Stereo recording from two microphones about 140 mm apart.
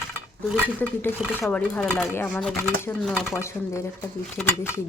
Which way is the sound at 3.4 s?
20° left (ahead or behind).